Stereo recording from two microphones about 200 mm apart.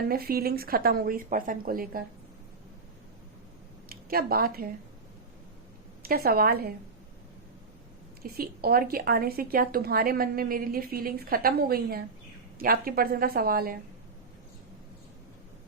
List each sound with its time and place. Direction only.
0.1 s a woman's voice: 50° right (ahead or behind)
3.8 s speech: 50° right (ahead or behind)
6.0 s a woman's voice: 50° right (ahead or behind)
8.2 s a woman's voice: 50° right (ahead or behind)